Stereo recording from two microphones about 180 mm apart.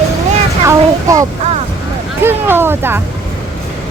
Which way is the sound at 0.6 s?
15° right (ahead or behind).